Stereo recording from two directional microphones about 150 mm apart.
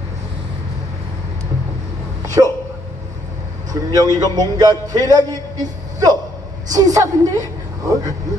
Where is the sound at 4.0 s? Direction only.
20° left (ahead or behind).